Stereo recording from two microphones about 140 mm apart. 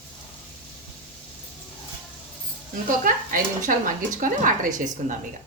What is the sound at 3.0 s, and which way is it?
Speech, 75° right (ahead or behind).